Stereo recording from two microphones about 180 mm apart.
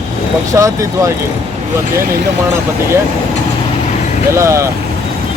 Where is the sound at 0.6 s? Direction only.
15° right (ahead or behind).